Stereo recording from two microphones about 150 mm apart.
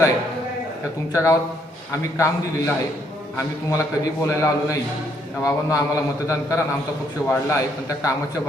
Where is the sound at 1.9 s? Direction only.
20° left (ahead or behind).